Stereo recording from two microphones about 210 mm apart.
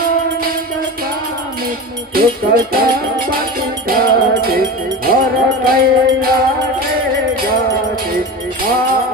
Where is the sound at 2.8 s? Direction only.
45° right (ahead or behind).